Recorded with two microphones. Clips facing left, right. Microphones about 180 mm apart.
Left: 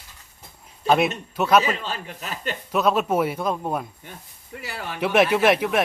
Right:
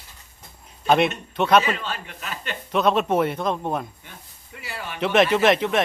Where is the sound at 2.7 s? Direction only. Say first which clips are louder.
Right 1 dB; 5° left (ahead or behind).